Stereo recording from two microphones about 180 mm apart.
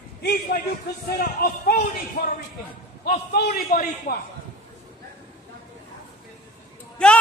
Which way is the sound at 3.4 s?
55° left (ahead or behind).